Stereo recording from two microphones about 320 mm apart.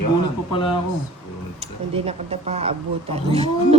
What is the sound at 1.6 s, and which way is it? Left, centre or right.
Speech, centre.